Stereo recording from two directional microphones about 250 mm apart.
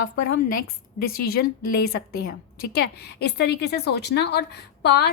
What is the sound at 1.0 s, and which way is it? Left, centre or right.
A woman's voice, left.